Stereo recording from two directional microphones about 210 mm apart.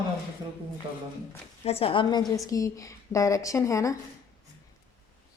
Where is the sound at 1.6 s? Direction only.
30° left (ahead or behind).